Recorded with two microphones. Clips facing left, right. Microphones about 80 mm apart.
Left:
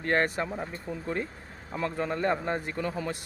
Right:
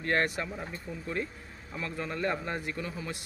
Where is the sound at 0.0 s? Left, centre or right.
Left.